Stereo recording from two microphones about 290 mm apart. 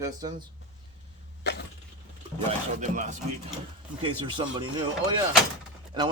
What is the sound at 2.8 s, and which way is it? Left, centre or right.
Speech, right.